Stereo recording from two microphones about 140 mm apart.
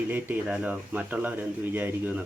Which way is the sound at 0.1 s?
15° right (ahead or behind).